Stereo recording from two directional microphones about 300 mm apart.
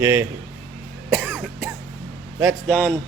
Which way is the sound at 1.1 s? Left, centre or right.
Centre.